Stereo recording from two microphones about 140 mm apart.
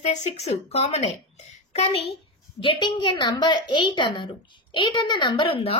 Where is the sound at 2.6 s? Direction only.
35° left (ahead or behind).